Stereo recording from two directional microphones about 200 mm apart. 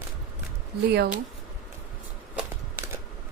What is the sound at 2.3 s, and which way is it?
Walk, 10° right (ahead or behind).